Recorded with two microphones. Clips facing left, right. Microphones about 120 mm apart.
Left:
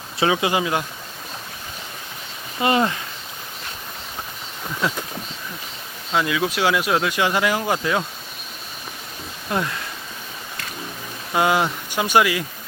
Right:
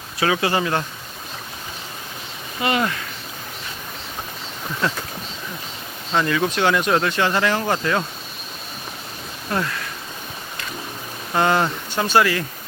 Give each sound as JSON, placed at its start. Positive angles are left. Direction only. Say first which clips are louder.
{"t": 0.2, "sound": "speech", "louder": "even", "side_deg": 20}
{"t": 2.6, "sound": "speech", "louder": "left 2 dB", "side_deg": 25}
{"t": 4.8, "sound": "speech", "louder": "even", "side_deg": 10}
{"t": 6.1, "sound": "speech", "louder": "right 1 dB", "side_deg": 5}
{"t": 9.5, "sound": "speech", "louder": "even", "side_deg": 15}
{"t": 11.3, "sound": "speech", "louder": "even", "side_deg": 10}